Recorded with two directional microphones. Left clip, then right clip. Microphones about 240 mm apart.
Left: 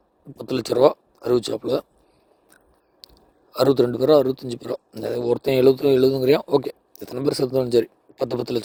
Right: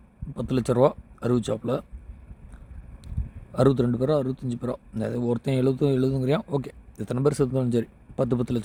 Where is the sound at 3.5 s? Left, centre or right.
Left.